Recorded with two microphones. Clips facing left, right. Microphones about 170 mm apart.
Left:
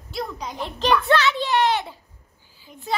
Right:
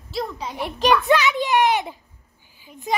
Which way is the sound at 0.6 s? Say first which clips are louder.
Right 2 dB; 15° right (ahead or behind).